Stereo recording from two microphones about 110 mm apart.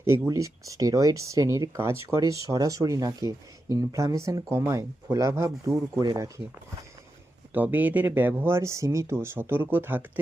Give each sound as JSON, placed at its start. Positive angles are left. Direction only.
{"t": 0.3, "sound": "speech", "side_deg": -30}
{"t": 7.5, "sound": "speech", "side_deg": -15}